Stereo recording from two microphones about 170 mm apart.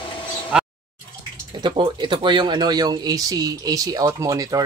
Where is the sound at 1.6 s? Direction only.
30° right (ahead or behind).